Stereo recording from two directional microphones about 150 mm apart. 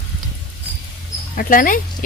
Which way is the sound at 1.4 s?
65° left (ahead or behind).